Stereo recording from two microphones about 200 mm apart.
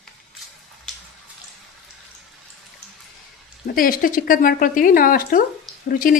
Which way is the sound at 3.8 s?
45° left (ahead or behind).